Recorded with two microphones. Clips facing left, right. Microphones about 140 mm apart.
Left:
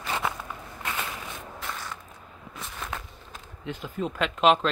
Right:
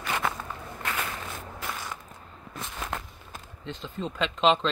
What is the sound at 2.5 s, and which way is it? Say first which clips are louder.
Walk: right 2 dB; centre (ahead or behind).